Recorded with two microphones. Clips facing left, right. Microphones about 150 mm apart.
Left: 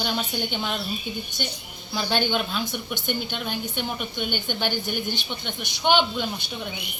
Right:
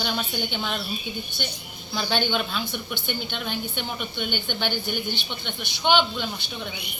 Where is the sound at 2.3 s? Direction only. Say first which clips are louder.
Left 1 dB; 5° left (ahead or behind).